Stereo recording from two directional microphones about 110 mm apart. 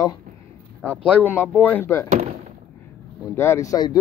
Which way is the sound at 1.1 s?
15° left (ahead or behind).